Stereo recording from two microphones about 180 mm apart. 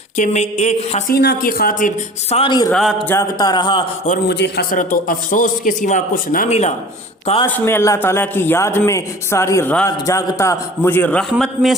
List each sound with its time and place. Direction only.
0.2 s a woman's voice: 40° left (ahead or behind)
1.1 s speech: 60° left (ahead or behind)
2.3 s a man's voice: 25° left (ahead or behind)
4.3 s a man's voice: 70° left (ahead or behind)
4.7 s a man's voice: 50° left (ahead or behind)
7.4 s a man's voice: 10° left (ahead or behind)